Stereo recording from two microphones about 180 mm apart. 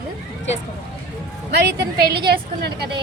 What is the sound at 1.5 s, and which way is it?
A woman's voice, 65° right (ahead or behind).